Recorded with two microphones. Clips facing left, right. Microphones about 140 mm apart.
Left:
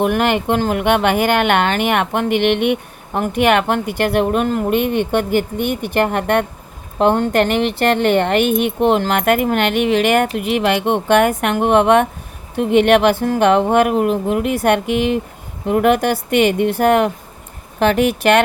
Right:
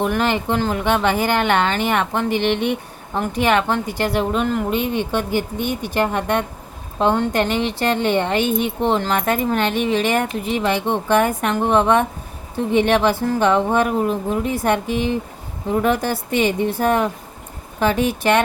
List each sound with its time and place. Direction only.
0.0 s speech: 60° left (ahead or behind)